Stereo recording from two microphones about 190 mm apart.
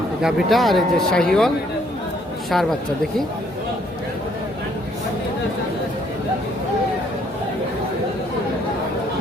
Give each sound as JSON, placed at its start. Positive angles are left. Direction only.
{"t": 0.2, "sound": "speech", "side_deg": 0}
{"t": 2.5, "sound": "speech", "side_deg": 0}